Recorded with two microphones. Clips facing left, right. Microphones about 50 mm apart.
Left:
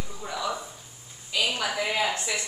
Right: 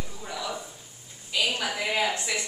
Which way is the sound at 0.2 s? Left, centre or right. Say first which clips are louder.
Left 4 dB; centre.